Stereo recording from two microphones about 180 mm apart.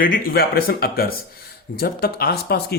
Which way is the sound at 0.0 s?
55° left (ahead or behind).